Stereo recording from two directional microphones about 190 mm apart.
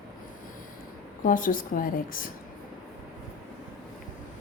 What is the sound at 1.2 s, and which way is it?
A woman's voice, 45° left (ahead or behind).